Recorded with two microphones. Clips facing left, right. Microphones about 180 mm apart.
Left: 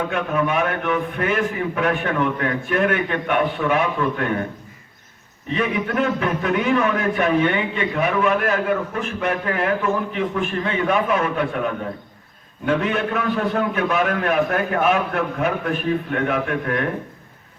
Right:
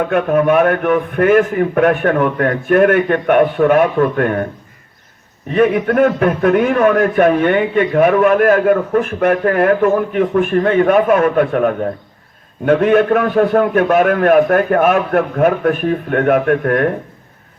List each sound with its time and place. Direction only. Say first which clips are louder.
0.1 s a man's voice: right 9 dB; 50° right (ahead or behind)
5.5 s a man's voice: right 10 dB; 50° right (ahead or behind)